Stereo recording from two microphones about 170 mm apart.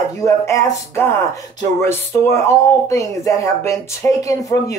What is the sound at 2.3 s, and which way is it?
Speech, 20° left (ahead or behind).